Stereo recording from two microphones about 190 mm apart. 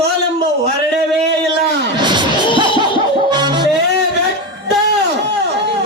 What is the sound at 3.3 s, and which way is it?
Music, 25° right (ahead or behind).